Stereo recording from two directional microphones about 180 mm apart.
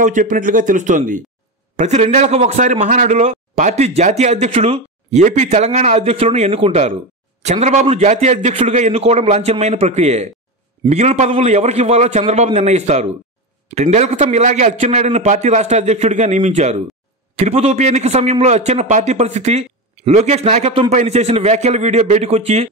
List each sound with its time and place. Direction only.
0.0 s a man's voice: 45° right (ahead or behind)